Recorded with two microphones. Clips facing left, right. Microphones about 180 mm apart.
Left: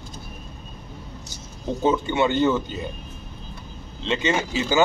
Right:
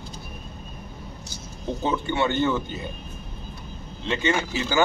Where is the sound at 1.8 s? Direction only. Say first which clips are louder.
Left 4 dB; 20° left (ahead or behind).